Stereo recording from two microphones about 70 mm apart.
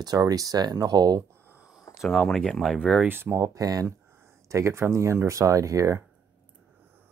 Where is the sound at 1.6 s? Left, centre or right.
Centre.